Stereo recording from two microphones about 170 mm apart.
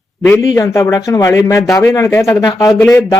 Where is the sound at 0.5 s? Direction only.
20° left (ahead or behind).